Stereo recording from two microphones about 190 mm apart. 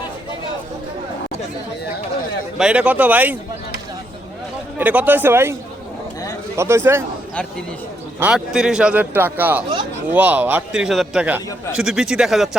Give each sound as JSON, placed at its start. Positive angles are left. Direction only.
{"t": 2.6, "sound": "speech", "side_deg": -5}
{"t": 4.8, "sound": "speech", "side_deg": -10}
{"t": 6.6, "sound": "speech", "side_deg": -15}
{"t": 8.2, "sound": "a man's voice", "side_deg": -5}